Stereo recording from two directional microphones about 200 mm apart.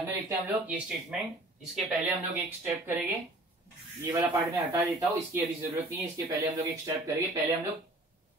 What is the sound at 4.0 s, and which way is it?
Speech, 10° right (ahead or behind).